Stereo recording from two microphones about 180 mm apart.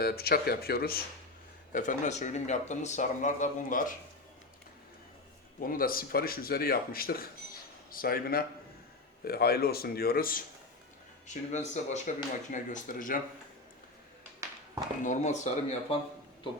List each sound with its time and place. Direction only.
0.0 s speech: 60° left (ahead or behind)
1.7 s speech: 45° left (ahead or behind)
5.5 s speech: 55° left (ahead or behind)
11.5 s speech: 40° left (ahead or behind)
15.0 s speech: 40° left (ahead or behind)